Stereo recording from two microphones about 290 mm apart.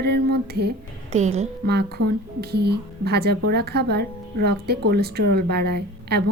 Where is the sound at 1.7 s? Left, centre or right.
Right.